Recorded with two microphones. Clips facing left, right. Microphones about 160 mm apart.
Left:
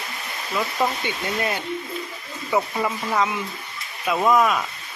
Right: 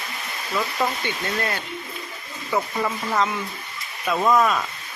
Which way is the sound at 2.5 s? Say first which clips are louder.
Left 1 dB; 5° left (ahead or behind).